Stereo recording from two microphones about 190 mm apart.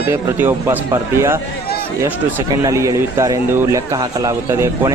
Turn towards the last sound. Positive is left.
turn(degrees=-15)  # may be behind; listen again after turning